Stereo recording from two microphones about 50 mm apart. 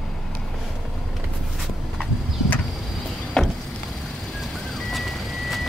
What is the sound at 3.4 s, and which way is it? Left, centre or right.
Vehicle, centre.